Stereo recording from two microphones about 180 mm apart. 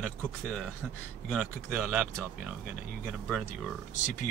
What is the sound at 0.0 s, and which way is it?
Speech, 5° left (ahead or behind).